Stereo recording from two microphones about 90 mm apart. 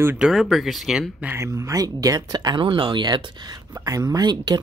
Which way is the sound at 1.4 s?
35° right (ahead or behind).